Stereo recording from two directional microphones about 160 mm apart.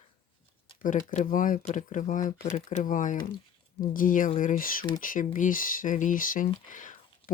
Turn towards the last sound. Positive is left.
turn(degrees=55)  # may be behind; listen again after turning